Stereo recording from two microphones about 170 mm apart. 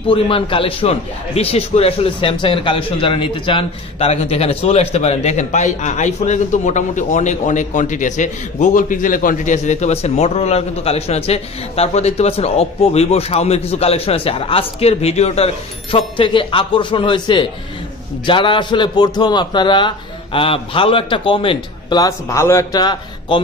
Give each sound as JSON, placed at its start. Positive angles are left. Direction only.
{"t": 0.1, "sound": "a man's voice", "side_deg": 30}